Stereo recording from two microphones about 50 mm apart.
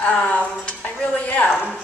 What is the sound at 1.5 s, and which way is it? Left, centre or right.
Speech, centre.